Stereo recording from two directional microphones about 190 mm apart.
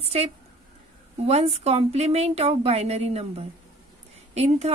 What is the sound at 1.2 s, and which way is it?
A woman's voice, 35° right (ahead or behind).